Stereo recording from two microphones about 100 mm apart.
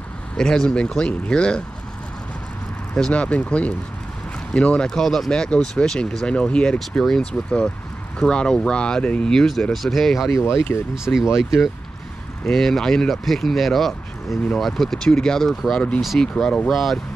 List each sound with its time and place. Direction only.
0.4 s speech: 5° left (ahead or behind)
2.9 s speech: 10° left (ahead or behind)
10.4 s speech: 25° left (ahead or behind)
11.1 s speech: 15° left (ahead or behind)
12.4 s speech: 5° left (ahead or behind)